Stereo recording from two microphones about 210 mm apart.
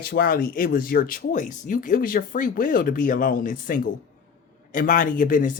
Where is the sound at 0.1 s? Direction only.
45° left (ahead or behind).